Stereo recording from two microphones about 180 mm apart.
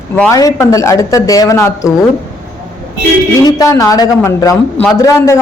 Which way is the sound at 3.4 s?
20° left (ahead or behind).